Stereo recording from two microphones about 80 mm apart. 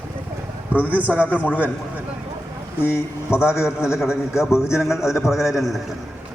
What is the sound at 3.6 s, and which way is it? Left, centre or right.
A man's voice, centre.